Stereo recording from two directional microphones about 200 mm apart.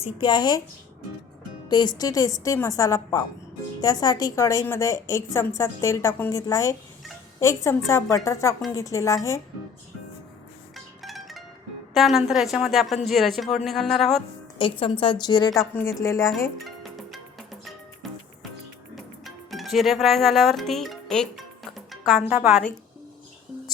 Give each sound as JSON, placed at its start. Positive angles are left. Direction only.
{"t": 0.0, "sound": "a woman's voice", "side_deg": 25}
{"t": 1.7, "sound": "a woman's voice", "side_deg": 20}
{"t": 11.0, "sound": "zither", "side_deg": 0}
{"t": 11.9, "sound": "a woman's voice", "side_deg": 0}
{"t": 14.6, "sound": "a woman's voice", "side_deg": 25}
{"t": 16.6, "sound": "music", "side_deg": 0}
{"t": 19.2, "sound": "speech", "side_deg": 0}